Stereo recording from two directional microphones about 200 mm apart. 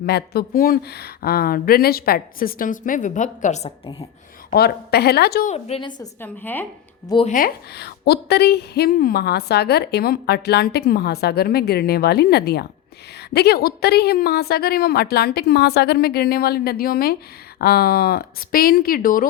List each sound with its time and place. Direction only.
0.0 s a woman's voice: 50° left (ahead or behind); by 3.7 s 35° left (ahead or behind)
4.5 s a woman's voice: 55° left (ahead or behind)
5.5 s a woman's voice: 30° left (ahead or behind)
6.0 s a woman's voice: 10° left (ahead or behind)
7.3 s a woman's voice: 45° left (ahead or behind)